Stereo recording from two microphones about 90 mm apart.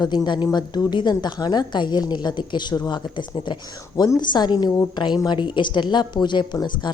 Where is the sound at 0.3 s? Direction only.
55° left (ahead or behind).